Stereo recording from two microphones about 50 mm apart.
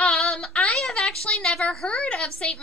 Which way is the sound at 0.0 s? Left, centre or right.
Centre.